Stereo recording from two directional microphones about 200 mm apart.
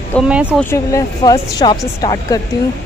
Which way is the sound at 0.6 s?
15° left (ahead or behind).